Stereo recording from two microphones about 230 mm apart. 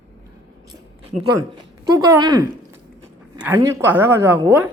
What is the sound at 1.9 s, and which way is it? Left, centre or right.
Speech, centre.